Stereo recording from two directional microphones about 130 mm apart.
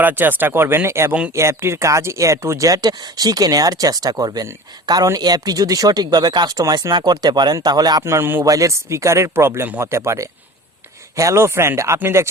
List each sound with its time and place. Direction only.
0.0 s speech: 15° right (ahead or behind)